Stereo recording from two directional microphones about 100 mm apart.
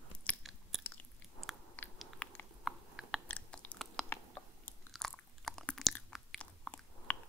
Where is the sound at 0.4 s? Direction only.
Centre (ahead or behind).